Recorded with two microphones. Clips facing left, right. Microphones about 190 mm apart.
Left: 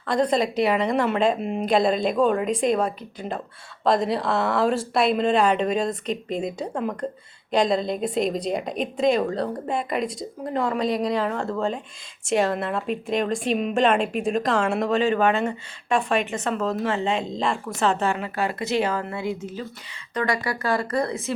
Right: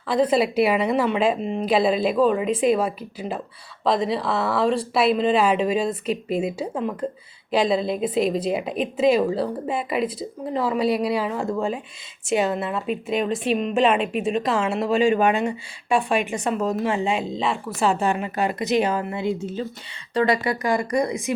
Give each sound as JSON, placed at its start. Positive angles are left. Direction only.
{"t": 0.0, "sound": "a woman's voice", "side_deg": -5}